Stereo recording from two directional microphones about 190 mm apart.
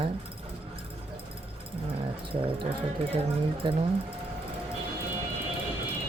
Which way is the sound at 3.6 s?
25° right (ahead or behind).